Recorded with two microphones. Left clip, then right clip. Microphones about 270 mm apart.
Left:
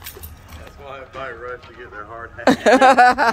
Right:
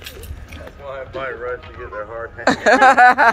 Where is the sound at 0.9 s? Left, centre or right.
Centre.